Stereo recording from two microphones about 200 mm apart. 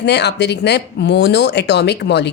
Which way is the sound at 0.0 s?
55° left (ahead or behind).